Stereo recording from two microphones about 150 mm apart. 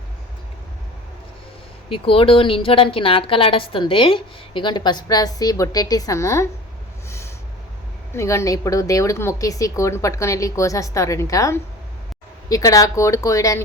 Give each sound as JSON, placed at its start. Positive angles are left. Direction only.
{"t": 1.9, "sound": "a woman's voice", "side_deg": 35}
{"t": 8.1, "sound": "speech", "side_deg": 20}